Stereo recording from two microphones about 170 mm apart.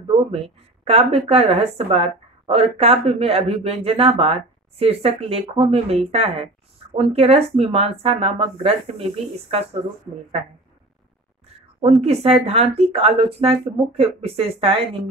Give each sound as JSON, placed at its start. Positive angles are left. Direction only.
{"t": 0.3, "sound": "a woman's voice", "side_deg": -35}
{"t": 11.8, "sound": "a woman's voice", "side_deg": -40}